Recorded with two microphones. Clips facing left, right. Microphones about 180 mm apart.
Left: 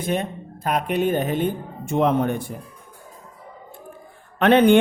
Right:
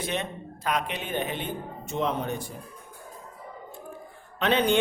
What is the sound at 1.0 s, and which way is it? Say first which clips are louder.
Speech: left 9 dB; 40° left (ahead or behind).